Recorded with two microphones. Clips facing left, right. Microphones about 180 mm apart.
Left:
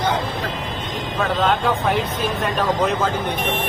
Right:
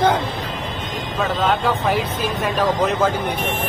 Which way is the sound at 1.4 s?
Centre (ahead or behind).